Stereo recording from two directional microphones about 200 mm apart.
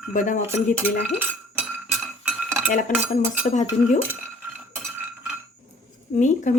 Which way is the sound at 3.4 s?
35° left (ahead or behind).